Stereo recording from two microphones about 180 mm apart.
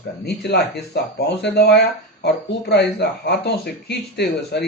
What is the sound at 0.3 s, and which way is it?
Speech, 65° left (ahead or behind).